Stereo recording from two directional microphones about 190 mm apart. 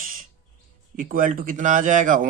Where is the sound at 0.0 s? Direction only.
45° right (ahead or behind).